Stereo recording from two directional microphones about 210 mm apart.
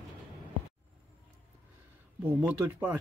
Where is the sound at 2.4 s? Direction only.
10° right (ahead or behind).